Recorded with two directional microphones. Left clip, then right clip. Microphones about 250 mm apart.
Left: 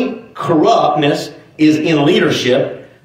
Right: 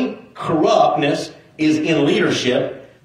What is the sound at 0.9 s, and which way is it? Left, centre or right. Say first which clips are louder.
A man's voice: left 4 dB; centre.